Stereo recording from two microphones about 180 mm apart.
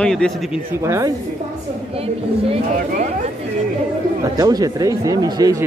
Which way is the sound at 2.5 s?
45° right (ahead or behind).